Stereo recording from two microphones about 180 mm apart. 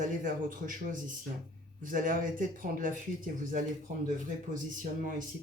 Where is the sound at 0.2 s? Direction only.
45° right (ahead or behind).